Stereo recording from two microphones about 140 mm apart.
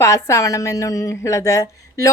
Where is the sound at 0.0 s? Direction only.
20° left (ahead or behind).